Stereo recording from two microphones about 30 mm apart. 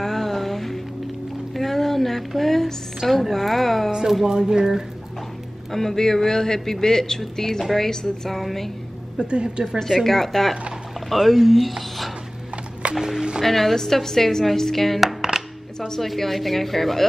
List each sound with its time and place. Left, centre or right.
0.0 s music: centre
3.1 s speech: centre
4.3 s speech: centre
5.7 s speech: centre
9.2 s a woman's voice: right
10.0 s speech: centre
12.8 s music: right
13.4 s speech: centre
15.0 s music: centre
16.2 s speech: centre